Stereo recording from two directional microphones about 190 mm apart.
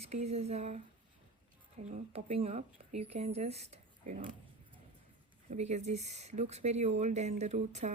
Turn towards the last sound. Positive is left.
turn(degrees=-35)  # may be behind; listen again after turning